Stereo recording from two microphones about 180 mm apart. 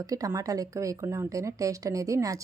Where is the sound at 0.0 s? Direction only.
20° right (ahead or behind).